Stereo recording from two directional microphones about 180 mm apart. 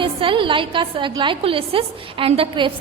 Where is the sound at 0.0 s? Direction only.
30° right (ahead or behind).